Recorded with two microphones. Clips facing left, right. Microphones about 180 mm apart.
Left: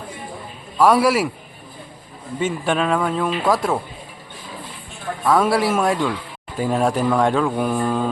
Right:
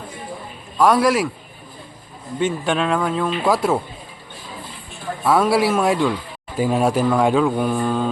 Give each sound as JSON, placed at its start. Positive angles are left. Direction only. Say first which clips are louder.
{"t": 0.8, "sound": "speech", "louder": "even", "side_deg": 5}
{"t": 2.4, "sound": "speech", "louder": "right 1 dB", "side_deg": 0}
{"t": 5.2, "sound": "speech", "louder": "right 1 dB", "side_deg": -5}